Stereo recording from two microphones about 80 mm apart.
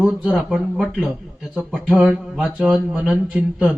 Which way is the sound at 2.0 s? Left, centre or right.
Centre.